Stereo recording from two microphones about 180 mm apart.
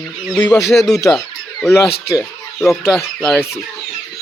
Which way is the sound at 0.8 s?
20° left (ahead or behind).